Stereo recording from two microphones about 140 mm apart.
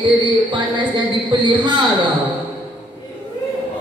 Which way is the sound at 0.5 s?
35° right (ahead or behind).